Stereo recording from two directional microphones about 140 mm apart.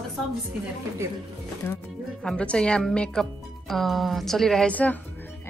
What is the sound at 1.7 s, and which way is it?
A woman's voice, 15° left (ahead or behind).